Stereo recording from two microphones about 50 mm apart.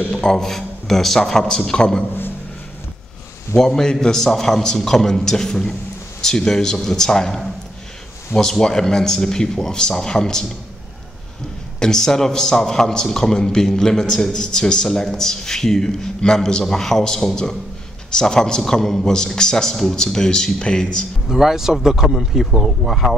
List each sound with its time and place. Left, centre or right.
0.1 s a man's voice: centre
3.5 s a man's voice: centre
8.4 s a man's voice: centre
11.8 s a man's voice: centre
21.3 s speech: centre